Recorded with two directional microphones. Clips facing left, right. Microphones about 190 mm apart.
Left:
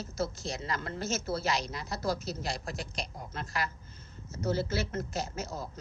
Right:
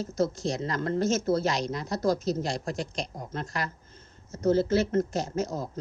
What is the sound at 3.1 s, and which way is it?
Speech, 40° right (ahead or behind).